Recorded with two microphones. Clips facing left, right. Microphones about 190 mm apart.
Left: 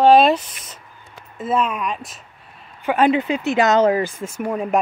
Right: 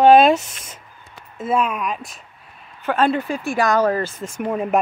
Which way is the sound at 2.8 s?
15° left (ahead or behind).